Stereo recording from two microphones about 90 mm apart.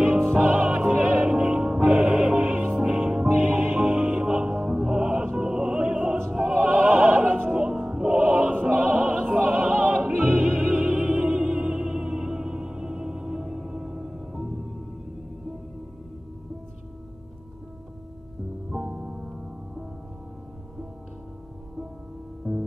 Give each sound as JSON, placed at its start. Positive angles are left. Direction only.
{"t": 0.2, "sound": "music", "side_deg": -20}
{"t": 6.3, "sound": "opera", "side_deg": -5}
{"t": 7.6, "sound": "music", "side_deg": -10}
{"t": 8.6, "sound": "opera", "side_deg": -5}
{"t": 18.7, "sound": "music", "side_deg": -10}
{"t": 22.5, "sound": "music", "side_deg": 0}